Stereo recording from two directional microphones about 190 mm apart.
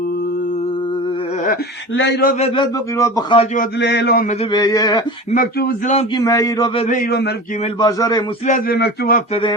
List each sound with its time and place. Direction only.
1.9 s speech: 70° left (ahead or behind)
2.4 s a man's voice: 20° left (ahead or behind)
3.8 s speech: 65° left (ahead or behind)
4.5 s a man's voice: 20° left (ahead or behind)
5.3 s speech: 50° left (ahead or behind)
6.1 s a man's voice: 15° left (ahead or behind)
6.7 s speech: 40° left (ahead or behind); by 7.3 s 55° left (ahead or behind)
7.8 s a man's voice: 20° left (ahead or behind)
8.4 s speech: 45° left (ahead or behind)
9.3 s a man's voice: 25° left (ahead or behind)